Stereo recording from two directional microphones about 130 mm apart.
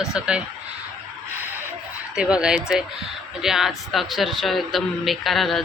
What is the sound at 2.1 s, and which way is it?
Speech, 5° right (ahead or behind).